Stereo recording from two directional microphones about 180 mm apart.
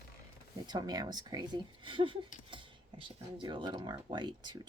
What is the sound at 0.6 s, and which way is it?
Speech, 25° right (ahead or behind).